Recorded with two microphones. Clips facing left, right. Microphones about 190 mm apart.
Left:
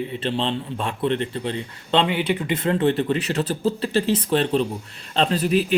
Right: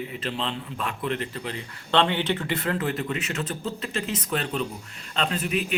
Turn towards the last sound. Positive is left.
turn(degrees=35)  # may be behind; listen again after turning